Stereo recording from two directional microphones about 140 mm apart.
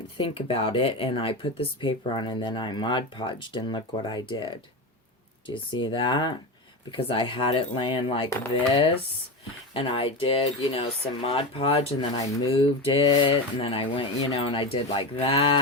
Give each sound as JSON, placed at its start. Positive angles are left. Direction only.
{"t": 0.3, "sound": "speech", "side_deg": 45}
{"t": 5.7, "sound": "speech", "side_deg": 35}
{"t": 9.7, "sound": "speech", "side_deg": 40}